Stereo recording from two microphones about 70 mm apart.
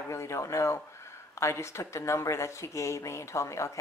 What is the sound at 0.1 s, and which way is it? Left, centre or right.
Speech, left.